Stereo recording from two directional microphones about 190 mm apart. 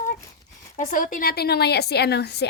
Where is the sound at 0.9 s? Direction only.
45° left (ahead or behind).